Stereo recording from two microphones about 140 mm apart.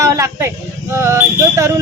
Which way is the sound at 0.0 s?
20° right (ahead or behind).